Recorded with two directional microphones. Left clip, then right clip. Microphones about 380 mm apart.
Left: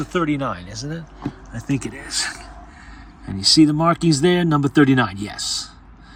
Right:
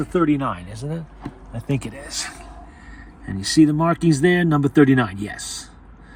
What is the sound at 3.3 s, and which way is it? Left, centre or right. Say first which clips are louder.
Speech: left 2 dB; centre.